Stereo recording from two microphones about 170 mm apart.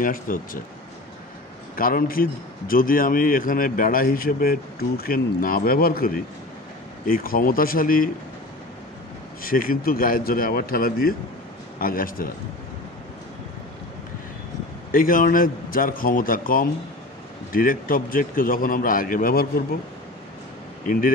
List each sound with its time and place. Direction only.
0.0 s a man's voice: 55° left (ahead or behind)
1.8 s a man's voice: 55° left (ahead or behind)
9.4 s a man's voice: 55° left (ahead or behind)
14.9 s a man's voice: 55° left (ahead or behind)
20.8 s speech: 55° left (ahead or behind)